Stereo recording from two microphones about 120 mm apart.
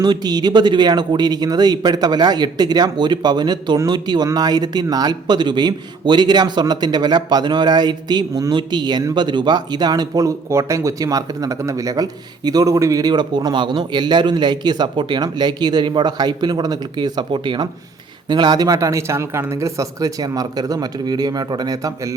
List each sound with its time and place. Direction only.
0.0 s speech: 35° right (ahead or behind)